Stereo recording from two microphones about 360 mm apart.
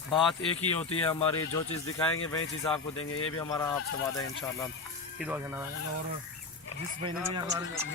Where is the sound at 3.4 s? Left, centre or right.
Centre.